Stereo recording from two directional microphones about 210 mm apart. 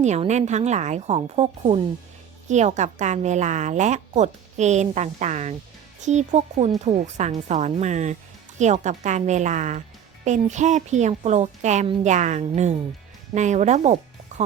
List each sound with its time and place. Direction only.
0.0 s a woman's voice: 35° right (ahead or behind)